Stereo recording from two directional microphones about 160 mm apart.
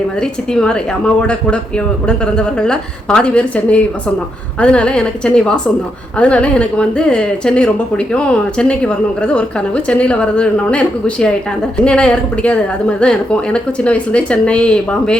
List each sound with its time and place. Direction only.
0.2 s speech: 5° left (ahead or behind)